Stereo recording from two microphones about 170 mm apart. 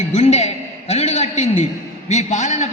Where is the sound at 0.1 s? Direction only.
40° left (ahead or behind).